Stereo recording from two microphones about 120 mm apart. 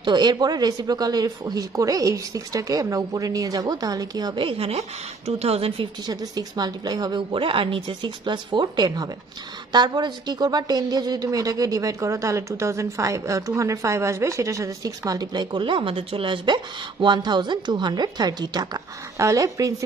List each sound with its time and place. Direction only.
0.0 s a woman's voice: 40° right (ahead or behind)
4.5 s a woman's voice: 55° right (ahead or behind)
6.0 s a woman's voice: 35° right (ahead or behind)